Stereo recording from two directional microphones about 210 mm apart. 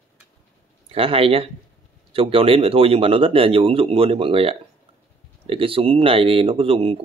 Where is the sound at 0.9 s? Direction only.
25° right (ahead or behind).